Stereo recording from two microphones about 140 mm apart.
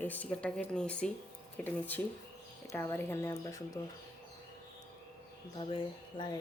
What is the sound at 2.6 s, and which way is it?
Speech, 20° left (ahead or behind).